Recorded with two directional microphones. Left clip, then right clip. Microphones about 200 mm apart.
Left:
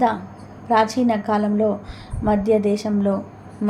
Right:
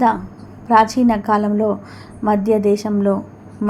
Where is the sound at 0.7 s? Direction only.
20° right (ahead or behind).